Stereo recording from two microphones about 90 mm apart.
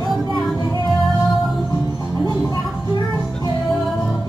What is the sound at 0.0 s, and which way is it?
Music, 50° left (ahead or behind).